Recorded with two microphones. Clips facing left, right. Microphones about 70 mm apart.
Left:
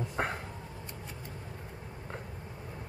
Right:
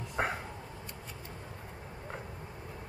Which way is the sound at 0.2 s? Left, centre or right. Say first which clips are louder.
Right 1 dB; centre.